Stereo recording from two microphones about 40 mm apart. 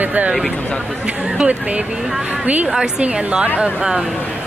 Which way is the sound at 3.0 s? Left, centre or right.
Right.